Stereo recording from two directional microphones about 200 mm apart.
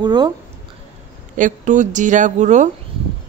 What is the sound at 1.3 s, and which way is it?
Speech, 40° right (ahead or behind).